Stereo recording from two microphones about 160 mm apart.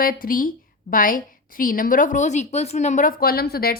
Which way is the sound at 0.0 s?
60° left (ahead or behind).